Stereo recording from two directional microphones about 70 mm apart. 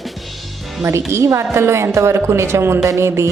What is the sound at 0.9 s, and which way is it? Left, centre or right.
Speech, right.